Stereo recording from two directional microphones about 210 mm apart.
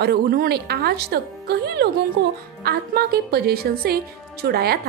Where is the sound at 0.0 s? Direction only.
50° right (ahead or behind).